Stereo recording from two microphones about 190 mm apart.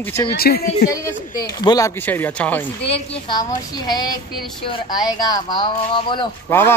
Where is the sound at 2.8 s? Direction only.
30° left (ahead or behind).